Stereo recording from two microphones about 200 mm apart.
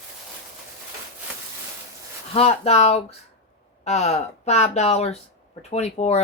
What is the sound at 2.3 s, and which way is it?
Speech, 30° left (ahead or behind).